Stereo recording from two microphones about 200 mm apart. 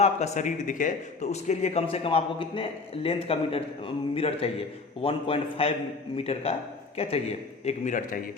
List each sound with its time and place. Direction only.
0.0 s a man's voice: 35° left (ahead or behind)